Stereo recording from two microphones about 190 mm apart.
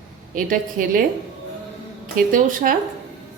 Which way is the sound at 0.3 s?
45° right (ahead or behind).